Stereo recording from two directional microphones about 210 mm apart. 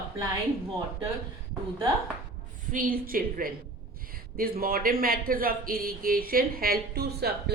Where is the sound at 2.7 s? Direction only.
40° right (ahead or behind).